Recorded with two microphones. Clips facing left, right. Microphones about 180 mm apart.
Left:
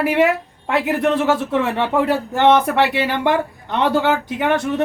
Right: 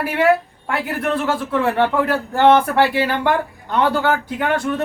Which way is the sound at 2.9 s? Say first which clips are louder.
Even; 20° left (ahead or behind).